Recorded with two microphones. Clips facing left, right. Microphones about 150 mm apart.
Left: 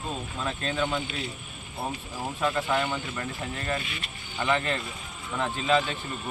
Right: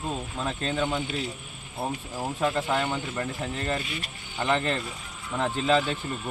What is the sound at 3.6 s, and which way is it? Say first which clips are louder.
Speech: right 2 dB; 40° right (ahead or behind).